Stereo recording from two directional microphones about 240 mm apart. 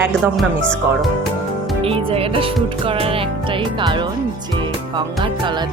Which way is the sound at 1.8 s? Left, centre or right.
Right.